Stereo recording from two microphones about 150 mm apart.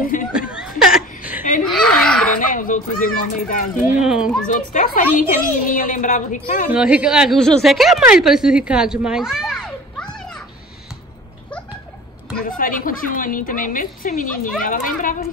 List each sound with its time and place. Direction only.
0.0 s speech: 65° left (ahead or behind)
0.3 s chuckle: 5° right (ahead or behind)
1.6 s a sound: 5° left (ahead or behind)
2.5 s a woman's voice: 60° left (ahead or behind)
4.0 s a child's voice: 5° right (ahead or behind)
4.5 s a woman's voice: 60° left (ahead or behind)
6.7 s a woman's voice: 5° right (ahead or behind)
12.4 s a woman's voice: 65° left (ahead or behind)